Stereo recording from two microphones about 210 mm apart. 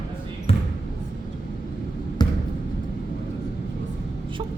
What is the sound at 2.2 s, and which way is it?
Basketball bounce, 20° left (ahead or behind).